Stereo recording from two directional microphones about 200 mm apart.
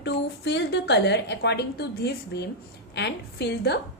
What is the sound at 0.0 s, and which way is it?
A woman's voice, 60° left (ahead or behind).